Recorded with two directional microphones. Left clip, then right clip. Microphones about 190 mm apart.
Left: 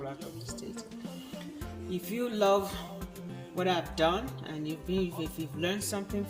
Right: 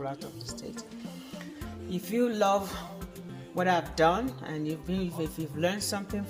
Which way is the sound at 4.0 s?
35° right (ahead or behind).